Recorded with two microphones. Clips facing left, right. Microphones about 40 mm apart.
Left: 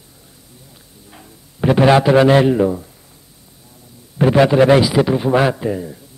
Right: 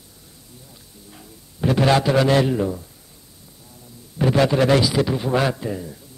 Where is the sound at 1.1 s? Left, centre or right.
Left.